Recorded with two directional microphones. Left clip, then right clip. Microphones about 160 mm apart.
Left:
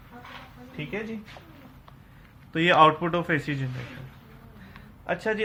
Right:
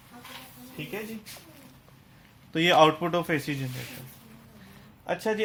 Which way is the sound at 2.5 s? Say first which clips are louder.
Left 2 dB; 55° right (ahead or behind).